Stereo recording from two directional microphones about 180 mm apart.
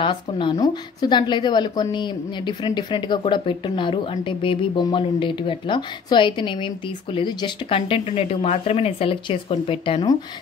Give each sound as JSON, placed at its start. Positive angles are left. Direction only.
{"t": 0.0, "sound": "a woman's voice", "side_deg": 25}